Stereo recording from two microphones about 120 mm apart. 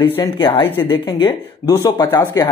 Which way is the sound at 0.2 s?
40° left (ahead or behind).